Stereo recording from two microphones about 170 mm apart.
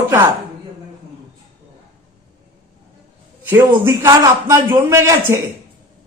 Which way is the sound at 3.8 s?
15° right (ahead or behind).